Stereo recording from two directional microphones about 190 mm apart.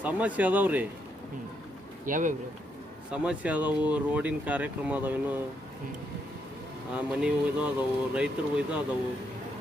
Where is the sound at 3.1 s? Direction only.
5° right (ahead or behind).